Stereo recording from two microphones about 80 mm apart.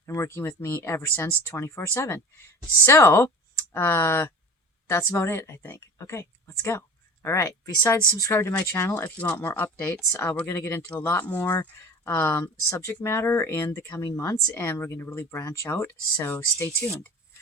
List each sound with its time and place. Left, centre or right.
0.0 s a woman's voice: left
9.0 s speech: centre
10.1 s speech: left
10.8 s speech: centre
12.0 s speech: left
16.2 s speech: left